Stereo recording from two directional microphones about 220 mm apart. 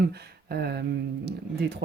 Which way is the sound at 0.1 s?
45° right (ahead or behind).